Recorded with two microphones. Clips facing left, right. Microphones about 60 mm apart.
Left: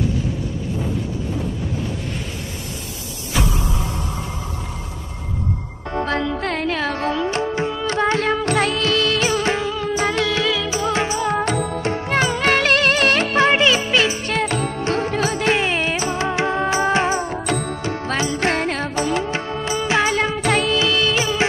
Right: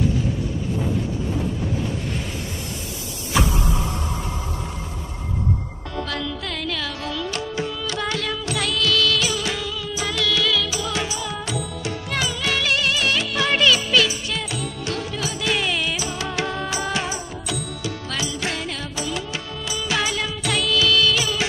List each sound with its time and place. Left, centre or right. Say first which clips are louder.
5.9 s music: left 7 dB; left
14.2 s music: left 7 dB; left